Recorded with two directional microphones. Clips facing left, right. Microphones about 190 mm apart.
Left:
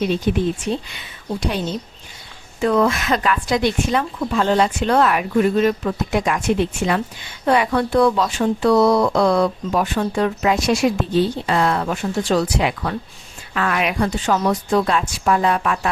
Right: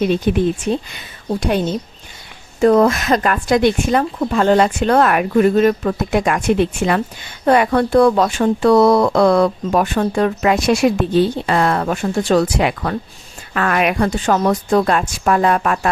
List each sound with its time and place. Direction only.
0.3 s speech: 60° right (ahead or behind)
0.7 s speech: 45° right (ahead or behind)